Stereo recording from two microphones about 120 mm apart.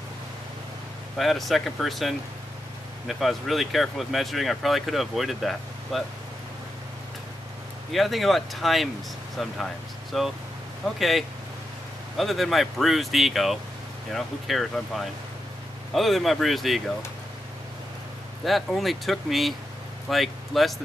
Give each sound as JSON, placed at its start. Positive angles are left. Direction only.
{"t": 1.1, "sound": "speech", "side_deg": 0}
{"t": 7.9, "sound": "speech", "side_deg": 0}
{"t": 18.4, "sound": "speech", "side_deg": 0}